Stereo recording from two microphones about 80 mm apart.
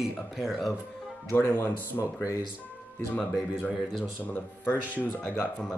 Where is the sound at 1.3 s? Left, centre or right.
Left.